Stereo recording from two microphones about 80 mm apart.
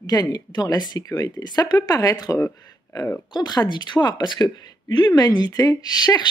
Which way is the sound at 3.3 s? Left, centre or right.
Left.